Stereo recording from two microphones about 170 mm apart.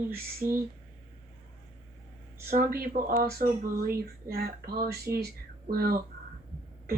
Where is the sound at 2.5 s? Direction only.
55° right (ahead or behind).